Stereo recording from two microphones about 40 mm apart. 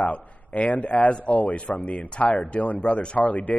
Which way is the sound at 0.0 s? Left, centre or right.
Left.